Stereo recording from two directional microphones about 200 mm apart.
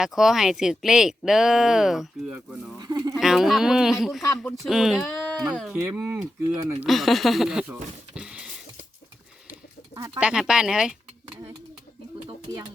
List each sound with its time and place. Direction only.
0.0 s speech: centre (ahead or behind)
2.7 s speech: 20° right (ahead or behind)
3.2 s speech: centre (ahead or behind)
5.7 s speech: 15° right (ahead or behind)
9.9 s speech: 10° right (ahead or behind)